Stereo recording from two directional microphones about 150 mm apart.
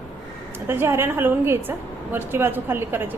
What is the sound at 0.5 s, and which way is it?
A woman's voice, 15° right (ahead or behind).